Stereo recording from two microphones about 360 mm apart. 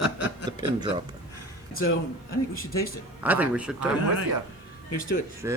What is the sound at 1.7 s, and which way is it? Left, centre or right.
Speech, left.